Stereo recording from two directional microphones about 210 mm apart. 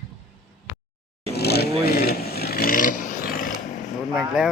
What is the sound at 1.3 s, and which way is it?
Vehicle, 50° left (ahead or behind).